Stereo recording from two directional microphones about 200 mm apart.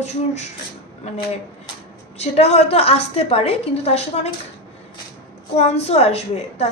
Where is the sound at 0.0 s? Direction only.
35° left (ahead or behind).